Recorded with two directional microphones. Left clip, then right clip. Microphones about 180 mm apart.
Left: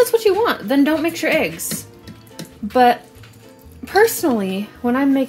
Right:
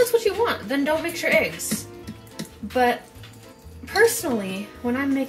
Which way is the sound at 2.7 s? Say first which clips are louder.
Left 7 dB; 65° left (ahead or behind).